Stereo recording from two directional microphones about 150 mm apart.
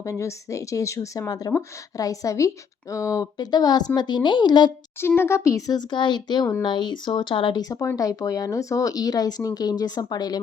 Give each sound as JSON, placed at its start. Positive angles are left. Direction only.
{"t": 0.0, "sound": "speech", "side_deg": 20}
{"t": 4.9, "sound": "speech", "side_deg": 15}